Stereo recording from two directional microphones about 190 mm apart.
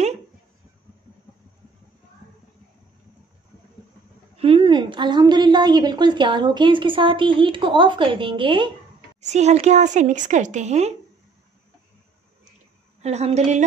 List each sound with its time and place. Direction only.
4.4 s a woman's voice: 30° right (ahead or behind)
9.2 s speech: 35° right (ahead or behind)
13.0 s speech: 35° right (ahead or behind)